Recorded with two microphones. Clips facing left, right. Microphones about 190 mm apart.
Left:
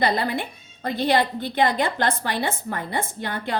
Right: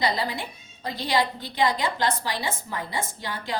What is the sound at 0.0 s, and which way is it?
A woman's voice, 55° left (ahead or behind).